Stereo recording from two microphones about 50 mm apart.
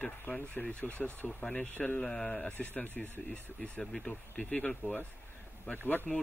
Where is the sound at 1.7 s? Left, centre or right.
Left.